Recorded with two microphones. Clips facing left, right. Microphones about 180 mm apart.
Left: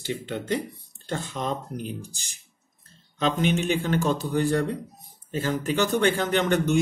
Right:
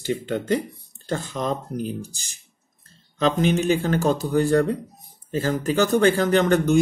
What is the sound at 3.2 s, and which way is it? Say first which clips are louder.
A man's voice: right 4 dB; 40° right (ahead or behind).